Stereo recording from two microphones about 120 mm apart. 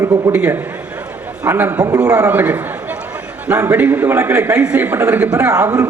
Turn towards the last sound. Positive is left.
turn(degrees=-25)  # may be behind; listen again after turning